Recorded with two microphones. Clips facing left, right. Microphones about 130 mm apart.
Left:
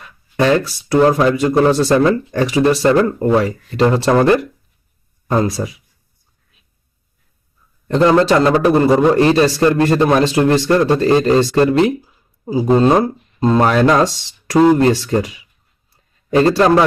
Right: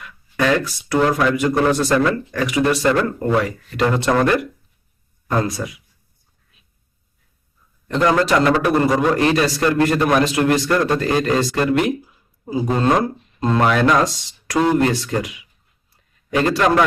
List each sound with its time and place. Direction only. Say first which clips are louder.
0.0 s a man's voice: left 4 dB; 30° left (ahead or behind)
5.6 s speech: left 4 dB; 30° left (ahead or behind)
7.9 s a man's voice: left 5 dB; 30° left (ahead or behind)